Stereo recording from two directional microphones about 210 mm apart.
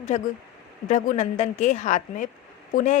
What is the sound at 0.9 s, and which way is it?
A woman's voice, 35° left (ahead or behind).